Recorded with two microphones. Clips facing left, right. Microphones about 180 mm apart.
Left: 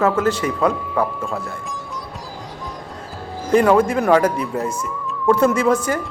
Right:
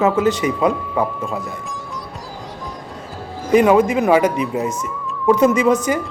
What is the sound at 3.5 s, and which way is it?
Speech, 10° right (ahead or behind).